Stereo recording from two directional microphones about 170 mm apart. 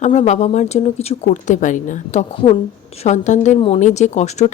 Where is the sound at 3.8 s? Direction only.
45° left (ahead or behind).